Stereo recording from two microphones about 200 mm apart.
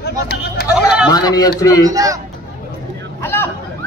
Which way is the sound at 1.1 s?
20° left (ahead or behind).